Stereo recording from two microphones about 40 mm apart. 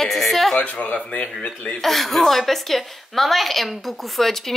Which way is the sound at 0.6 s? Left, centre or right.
Left.